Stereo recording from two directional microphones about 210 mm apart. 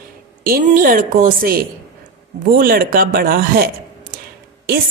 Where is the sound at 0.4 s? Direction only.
40° right (ahead or behind).